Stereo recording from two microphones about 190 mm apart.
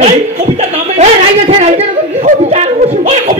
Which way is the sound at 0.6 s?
35° right (ahead or behind).